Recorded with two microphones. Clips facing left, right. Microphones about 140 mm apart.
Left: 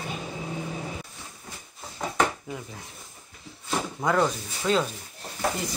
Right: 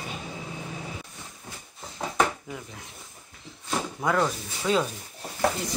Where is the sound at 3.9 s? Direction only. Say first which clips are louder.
Left 2 dB; centre (ahead or behind).